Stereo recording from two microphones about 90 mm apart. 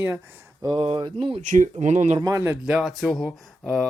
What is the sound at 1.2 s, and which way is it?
Speech, 90° right.